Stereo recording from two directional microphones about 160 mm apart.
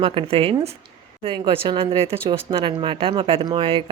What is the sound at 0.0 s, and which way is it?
A woman's voice, 35° right (ahead or behind).